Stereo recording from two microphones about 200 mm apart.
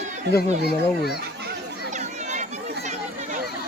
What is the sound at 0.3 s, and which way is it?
Speech, 55° left (ahead or behind).